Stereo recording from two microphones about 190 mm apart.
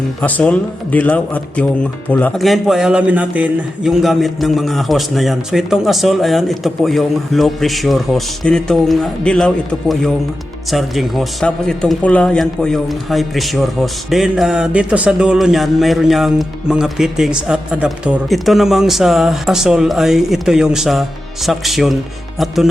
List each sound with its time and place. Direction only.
0.2 s speech: 10° left (ahead or behind)